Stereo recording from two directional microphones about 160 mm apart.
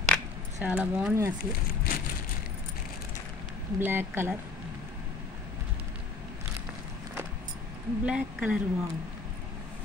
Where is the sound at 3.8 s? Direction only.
15° right (ahead or behind).